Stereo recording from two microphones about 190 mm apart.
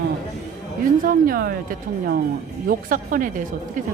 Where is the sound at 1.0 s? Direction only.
50° right (ahead or behind).